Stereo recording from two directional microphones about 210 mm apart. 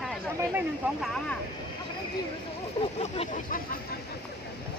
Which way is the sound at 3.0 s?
30° left (ahead or behind).